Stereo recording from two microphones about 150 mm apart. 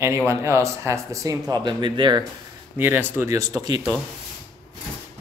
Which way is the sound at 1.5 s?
30° right (ahead or behind).